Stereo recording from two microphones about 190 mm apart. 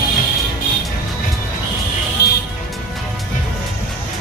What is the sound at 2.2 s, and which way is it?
Music, 55° left (ahead or behind).